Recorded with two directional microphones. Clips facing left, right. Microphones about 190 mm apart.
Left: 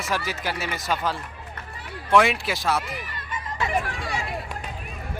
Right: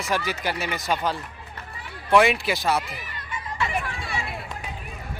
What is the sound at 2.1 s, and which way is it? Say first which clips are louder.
Speech: right 1 dB; centre (ahead or behind).